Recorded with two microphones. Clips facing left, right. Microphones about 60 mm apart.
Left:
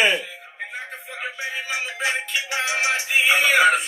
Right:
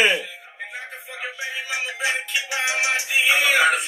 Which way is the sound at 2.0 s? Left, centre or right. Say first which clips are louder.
Even; left.